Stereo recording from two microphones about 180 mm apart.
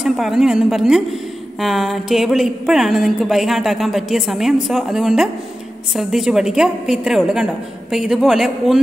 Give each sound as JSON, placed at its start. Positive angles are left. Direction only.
{"t": 0.0, "sound": "a woman's voice", "side_deg": 0}